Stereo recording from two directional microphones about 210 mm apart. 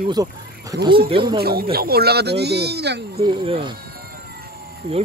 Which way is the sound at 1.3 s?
45° right (ahead or behind).